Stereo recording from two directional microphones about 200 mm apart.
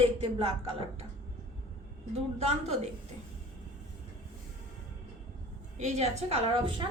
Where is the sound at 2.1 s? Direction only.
30° right (ahead or behind).